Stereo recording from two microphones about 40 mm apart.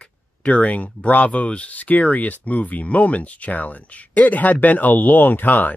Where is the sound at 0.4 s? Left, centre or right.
Left.